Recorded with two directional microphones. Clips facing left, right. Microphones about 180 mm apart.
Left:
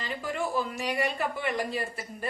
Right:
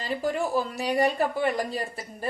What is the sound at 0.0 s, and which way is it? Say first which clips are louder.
A woman's voice: right 5 dB; 35° right (ahead or behind).